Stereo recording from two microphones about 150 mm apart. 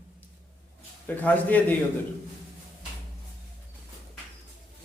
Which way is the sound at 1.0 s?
10° left (ahead or behind).